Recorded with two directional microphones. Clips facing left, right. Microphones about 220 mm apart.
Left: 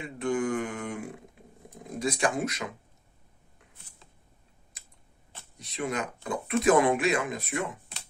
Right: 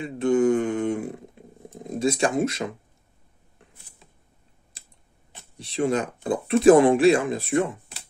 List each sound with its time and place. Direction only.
0.0 s mantra: 25° right (ahead or behind)
1.7 s speech: 25° right (ahead or behind)
4.7 s typing: 30° right (ahead or behind)
5.6 s speech: 30° right (ahead or behind)